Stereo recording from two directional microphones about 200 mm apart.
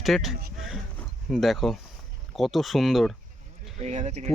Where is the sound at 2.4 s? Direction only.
Centre (ahead or behind).